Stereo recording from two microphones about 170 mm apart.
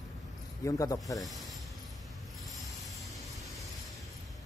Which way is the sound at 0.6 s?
20° left (ahead or behind).